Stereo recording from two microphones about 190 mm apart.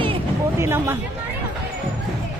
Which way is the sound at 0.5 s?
15° right (ahead or behind).